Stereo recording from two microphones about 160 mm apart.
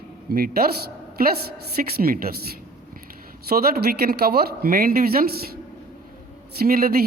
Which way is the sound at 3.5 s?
70° right (ahead or behind).